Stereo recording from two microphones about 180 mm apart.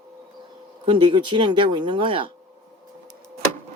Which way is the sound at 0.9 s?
25° right (ahead or behind).